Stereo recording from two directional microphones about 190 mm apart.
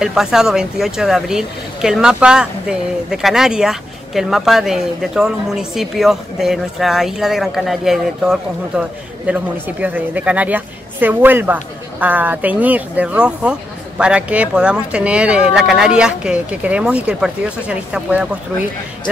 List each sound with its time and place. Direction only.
0.0 s speech: centre (ahead or behind)